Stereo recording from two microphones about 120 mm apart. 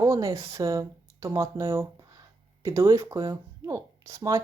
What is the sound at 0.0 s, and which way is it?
Speech, 25° right (ahead or behind).